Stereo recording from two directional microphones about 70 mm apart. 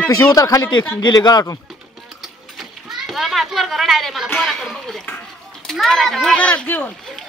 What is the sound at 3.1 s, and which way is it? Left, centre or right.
A woman's voice, centre.